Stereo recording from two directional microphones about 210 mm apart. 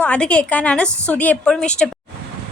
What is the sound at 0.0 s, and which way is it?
A woman's voice, 5° left (ahead or behind).